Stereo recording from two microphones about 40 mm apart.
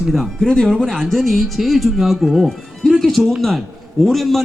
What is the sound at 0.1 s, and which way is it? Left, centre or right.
Speech, centre.